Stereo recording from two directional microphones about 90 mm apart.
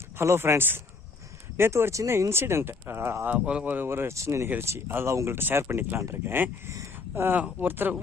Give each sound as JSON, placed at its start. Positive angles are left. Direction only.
{"t": 0.2, "sound": "speech", "side_deg": -30}
{"t": 3.2, "sound": "speech", "side_deg": -15}